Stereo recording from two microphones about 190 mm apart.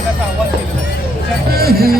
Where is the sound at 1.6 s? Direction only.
55° right (ahead or behind).